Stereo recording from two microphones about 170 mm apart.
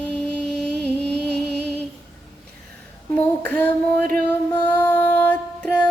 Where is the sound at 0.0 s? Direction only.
5° left (ahead or behind).